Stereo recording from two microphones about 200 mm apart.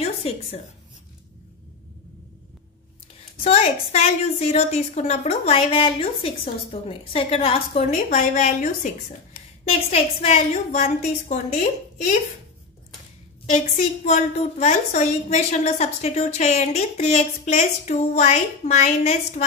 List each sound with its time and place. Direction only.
0.0 s a sound: 30° left (ahead or behind)
3.4 s a woman's voice: 30° left (ahead or behind)
13.5 s a woman's voice: 35° left (ahead or behind)